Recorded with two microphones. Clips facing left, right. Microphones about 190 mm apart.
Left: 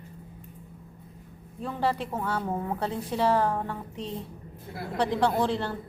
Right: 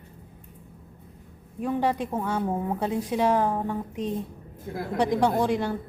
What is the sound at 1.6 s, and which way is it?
A woman's voice, 15° right (ahead or behind).